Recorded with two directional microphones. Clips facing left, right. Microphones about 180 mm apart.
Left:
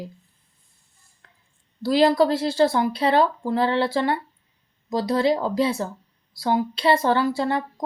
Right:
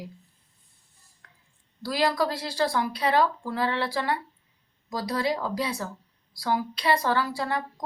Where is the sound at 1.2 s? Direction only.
25° left (ahead or behind).